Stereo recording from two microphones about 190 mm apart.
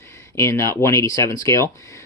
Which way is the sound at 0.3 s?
15° left (ahead or behind).